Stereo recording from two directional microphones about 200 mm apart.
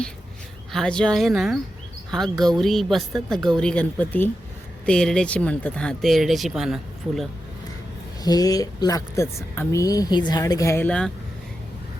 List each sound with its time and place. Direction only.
0.7 s a woman's voice: 5° left (ahead or behind)
8.2 s speech: 20° left (ahead or behind)